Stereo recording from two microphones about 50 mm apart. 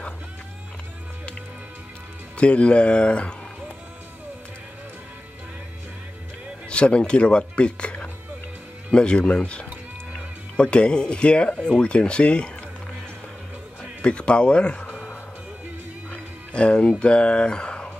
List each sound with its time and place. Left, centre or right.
2.3 s speech: left
6.7 s speech: left
14.0 s speech: left
16.1 s music: left
17.0 s speech: left